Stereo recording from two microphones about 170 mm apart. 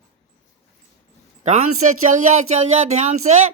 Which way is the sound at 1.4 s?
45° right (ahead or behind).